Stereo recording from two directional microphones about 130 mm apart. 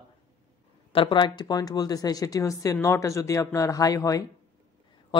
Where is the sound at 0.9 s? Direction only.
40° left (ahead or behind).